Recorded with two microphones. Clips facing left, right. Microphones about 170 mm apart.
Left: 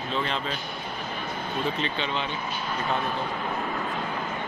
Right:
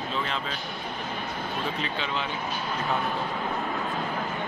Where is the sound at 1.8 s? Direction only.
5° right (ahead or behind).